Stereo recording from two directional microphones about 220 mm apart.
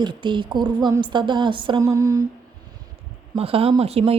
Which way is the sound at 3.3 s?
25° right (ahead or behind).